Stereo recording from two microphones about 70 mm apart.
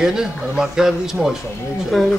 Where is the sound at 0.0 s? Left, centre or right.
Centre.